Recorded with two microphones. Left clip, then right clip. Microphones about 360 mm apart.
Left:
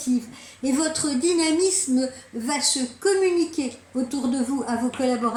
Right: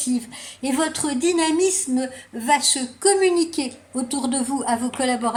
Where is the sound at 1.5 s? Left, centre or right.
Right.